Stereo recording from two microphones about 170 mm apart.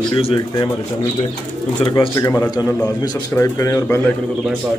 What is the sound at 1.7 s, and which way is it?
Speech, 30° left (ahead or behind).